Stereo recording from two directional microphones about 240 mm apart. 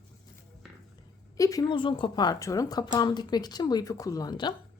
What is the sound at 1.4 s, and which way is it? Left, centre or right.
A woman's voice, centre.